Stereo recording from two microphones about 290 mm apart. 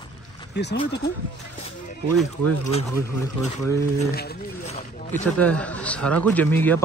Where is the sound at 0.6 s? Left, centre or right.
Left.